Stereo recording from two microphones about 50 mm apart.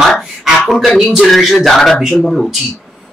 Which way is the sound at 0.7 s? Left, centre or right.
Centre.